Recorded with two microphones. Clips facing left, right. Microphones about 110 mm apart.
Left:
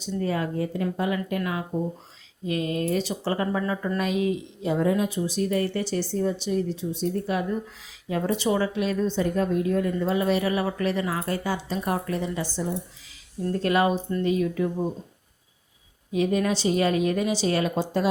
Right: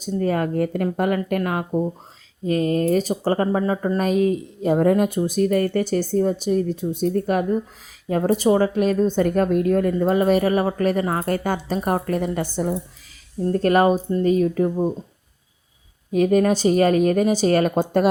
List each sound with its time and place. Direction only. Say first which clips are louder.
0.0 s speech: right 5 dB; 45° right (ahead or behind)
16.1 s speech: right 6 dB; 45° right (ahead or behind)